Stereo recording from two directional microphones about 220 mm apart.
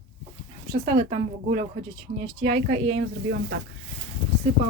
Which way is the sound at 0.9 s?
20° right (ahead or behind).